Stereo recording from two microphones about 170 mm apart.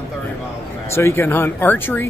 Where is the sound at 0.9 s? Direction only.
15° left (ahead or behind).